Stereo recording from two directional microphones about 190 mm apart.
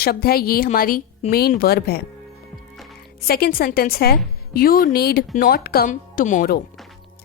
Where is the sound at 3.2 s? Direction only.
55° left (ahead or behind).